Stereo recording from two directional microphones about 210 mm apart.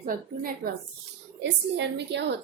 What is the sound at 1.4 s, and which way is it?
Speech, 55° right (ahead or behind).